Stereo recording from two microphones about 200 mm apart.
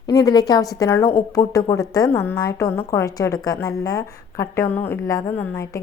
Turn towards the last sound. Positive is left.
turn(degrees=15)  # may be behind; listen again after turning